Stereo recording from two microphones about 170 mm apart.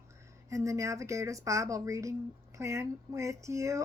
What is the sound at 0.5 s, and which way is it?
A woman's voice, 20° right (ahead or behind).